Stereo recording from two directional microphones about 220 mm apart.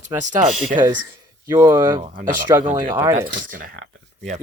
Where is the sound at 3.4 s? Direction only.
40° right (ahead or behind).